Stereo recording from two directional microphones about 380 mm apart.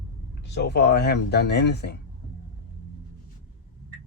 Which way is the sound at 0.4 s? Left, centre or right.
Left.